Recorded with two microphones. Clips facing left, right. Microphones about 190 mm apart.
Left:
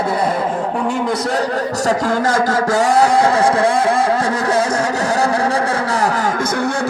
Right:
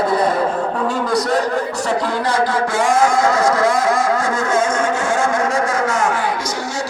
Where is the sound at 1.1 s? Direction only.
30° left (ahead or behind).